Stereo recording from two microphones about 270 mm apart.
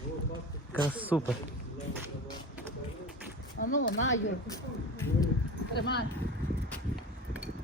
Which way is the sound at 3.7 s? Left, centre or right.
Left.